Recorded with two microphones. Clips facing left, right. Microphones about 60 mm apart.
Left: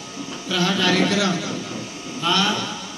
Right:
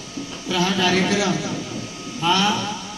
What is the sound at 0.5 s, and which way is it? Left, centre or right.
Speech, centre.